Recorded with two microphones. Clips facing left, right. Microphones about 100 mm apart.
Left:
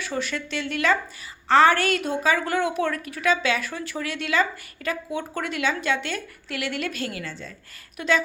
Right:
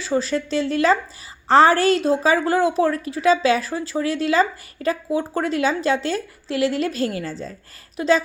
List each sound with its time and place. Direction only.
0.0 s a woman's voice: 30° right (ahead or behind)